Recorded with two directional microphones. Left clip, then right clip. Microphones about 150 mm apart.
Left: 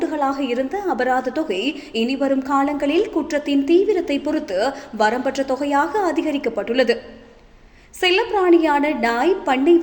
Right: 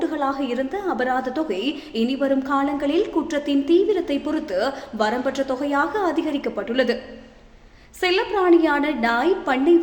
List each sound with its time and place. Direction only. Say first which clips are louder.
0.0 s a woman's voice: left 2 dB; 15° left (ahead or behind)
8.0 s a woman's voice: left 2 dB; 15° left (ahead or behind)